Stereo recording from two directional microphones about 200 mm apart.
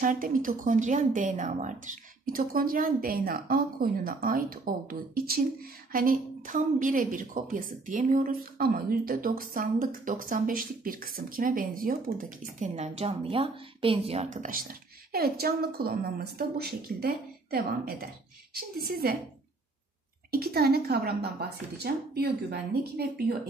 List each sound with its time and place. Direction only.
0.0 s a woman's voice: 40° right (ahead or behind)
20.2 s a woman's voice: 50° right (ahead or behind)